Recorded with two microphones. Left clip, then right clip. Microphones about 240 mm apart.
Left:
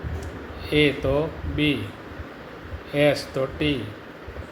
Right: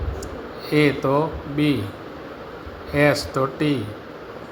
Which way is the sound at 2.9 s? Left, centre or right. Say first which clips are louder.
Right 2 dB; centre.